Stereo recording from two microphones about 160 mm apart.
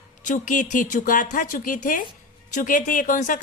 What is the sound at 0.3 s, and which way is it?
Speech, 55° left (ahead or behind).